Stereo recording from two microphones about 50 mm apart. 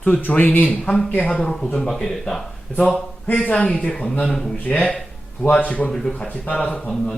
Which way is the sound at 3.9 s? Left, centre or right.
Centre.